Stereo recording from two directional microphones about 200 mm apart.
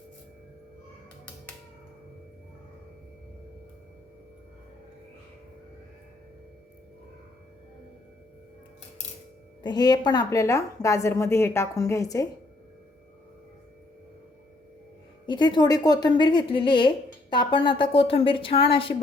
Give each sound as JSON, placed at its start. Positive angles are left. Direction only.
{"t": 9.6, "sound": "a woman's voice", "side_deg": 20}
{"t": 15.3, "sound": "a woman's voice", "side_deg": 20}